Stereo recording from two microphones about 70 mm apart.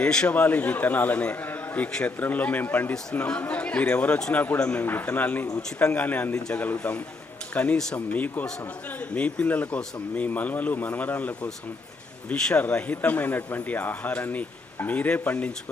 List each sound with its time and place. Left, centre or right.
0.0 s a man's voice: centre
3.2 s a man's voice: centre